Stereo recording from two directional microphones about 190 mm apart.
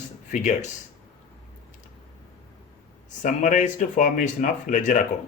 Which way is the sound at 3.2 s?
40° left (ahead or behind).